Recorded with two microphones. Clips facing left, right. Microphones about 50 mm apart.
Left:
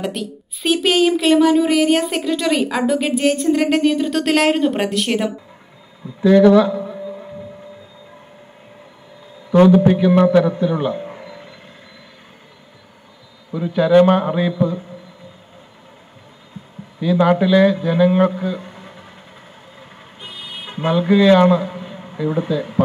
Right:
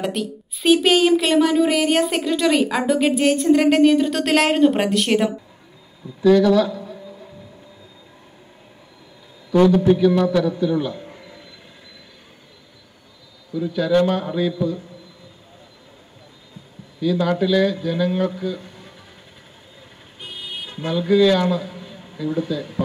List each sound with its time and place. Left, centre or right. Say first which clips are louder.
0.0 s a woman's voice: even; centre
6.2 s a sound: left 4 dB; left
9.6 s a man's voice: left 3 dB; left
13.5 s a man's voice: left 5 dB; left
17.0 s a man's voice: left 4 dB; left
20.2 s a sound: right 1 dB; left